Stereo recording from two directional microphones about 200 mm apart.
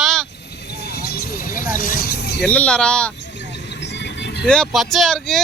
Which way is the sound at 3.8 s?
60° left (ahead or behind).